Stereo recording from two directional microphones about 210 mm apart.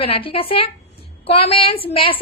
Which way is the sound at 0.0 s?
25° left (ahead or behind).